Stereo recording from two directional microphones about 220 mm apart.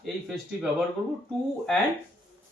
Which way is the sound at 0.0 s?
5° right (ahead or behind).